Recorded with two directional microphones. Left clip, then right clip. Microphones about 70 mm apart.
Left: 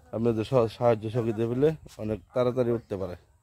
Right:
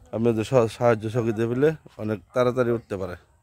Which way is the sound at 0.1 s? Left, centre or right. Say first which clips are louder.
Right 4 dB; right.